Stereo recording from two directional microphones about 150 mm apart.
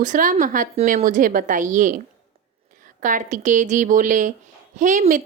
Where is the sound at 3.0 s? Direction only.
55° right (ahead or behind).